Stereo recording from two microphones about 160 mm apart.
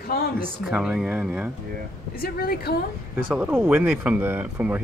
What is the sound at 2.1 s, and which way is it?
Speech, 70° left (ahead or behind).